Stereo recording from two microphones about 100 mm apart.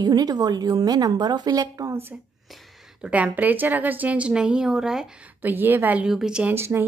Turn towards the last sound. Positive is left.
turn(degrees=-25)  # may be behind; listen again after turning